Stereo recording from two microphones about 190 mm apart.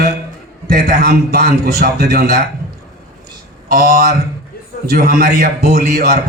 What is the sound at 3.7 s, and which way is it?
A man's voice, 50° right (ahead or behind).